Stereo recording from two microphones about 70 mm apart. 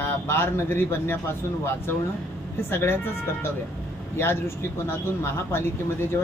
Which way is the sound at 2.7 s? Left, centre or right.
Left.